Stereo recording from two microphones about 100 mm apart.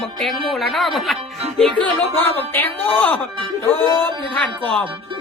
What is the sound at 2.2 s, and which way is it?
Speech, 20° left (ahead or behind).